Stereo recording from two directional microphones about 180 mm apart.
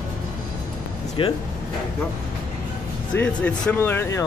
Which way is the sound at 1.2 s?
30° left (ahead or behind).